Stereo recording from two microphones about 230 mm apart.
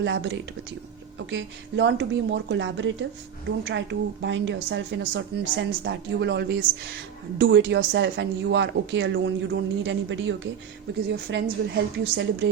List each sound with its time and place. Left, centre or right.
0.0 s speech: right